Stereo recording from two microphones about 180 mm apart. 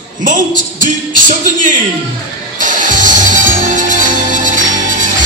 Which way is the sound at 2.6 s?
45° right (ahead or behind).